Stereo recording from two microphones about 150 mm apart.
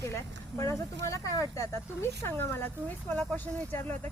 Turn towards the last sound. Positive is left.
turn(degrees=10)  # may be behind; listen again after turning